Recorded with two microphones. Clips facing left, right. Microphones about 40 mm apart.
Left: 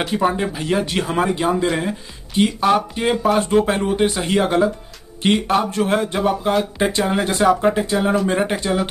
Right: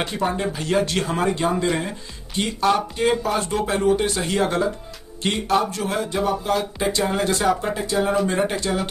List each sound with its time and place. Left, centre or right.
0.0 s speech: centre